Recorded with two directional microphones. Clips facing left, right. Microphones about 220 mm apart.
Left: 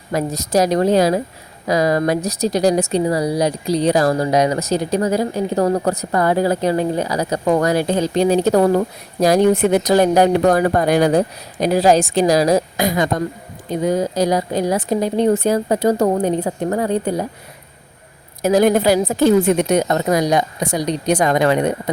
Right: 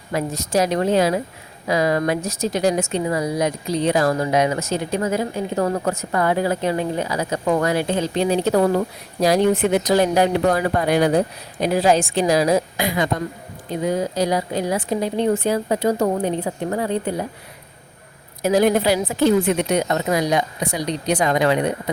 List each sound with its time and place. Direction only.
0.1 s speech: 40° left (ahead or behind)
18.4 s speech: 45° left (ahead or behind)